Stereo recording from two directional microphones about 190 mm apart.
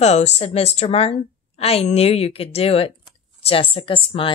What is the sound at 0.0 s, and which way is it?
A woman's voice, 35° left (ahead or behind).